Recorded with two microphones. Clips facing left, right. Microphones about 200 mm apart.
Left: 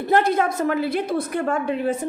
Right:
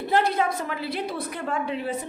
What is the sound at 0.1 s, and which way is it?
A woman's voice, 50° left (ahead or behind).